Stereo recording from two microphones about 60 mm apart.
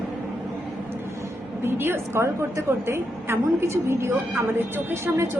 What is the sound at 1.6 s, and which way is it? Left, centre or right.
A woman's voice, right.